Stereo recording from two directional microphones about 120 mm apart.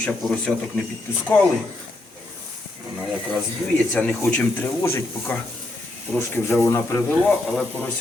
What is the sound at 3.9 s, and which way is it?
Speech, 10° left (ahead or behind).